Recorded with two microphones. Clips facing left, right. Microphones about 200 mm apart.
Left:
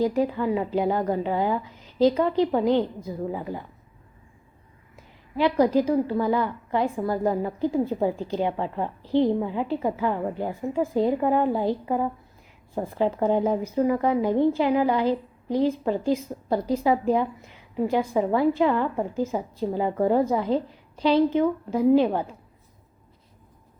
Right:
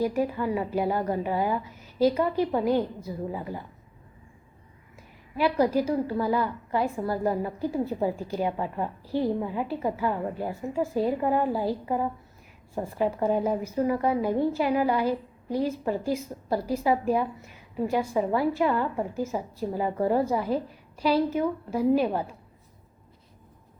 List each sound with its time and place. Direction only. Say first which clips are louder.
0.2 s a woman's voice: left 3 dB; 20° left (ahead or behind)
5.4 s a woman's voice: left 3 dB; 20° left (ahead or behind)